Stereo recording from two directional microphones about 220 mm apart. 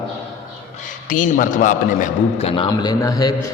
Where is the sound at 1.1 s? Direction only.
35° left (ahead or behind).